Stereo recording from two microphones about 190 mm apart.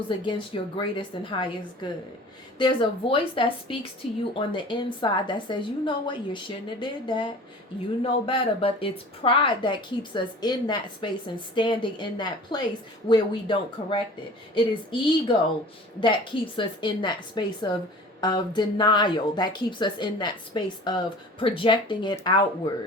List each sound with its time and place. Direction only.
0.1 s speech: 25° left (ahead or behind)
2.6 s speech: 25° left (ahead or behind)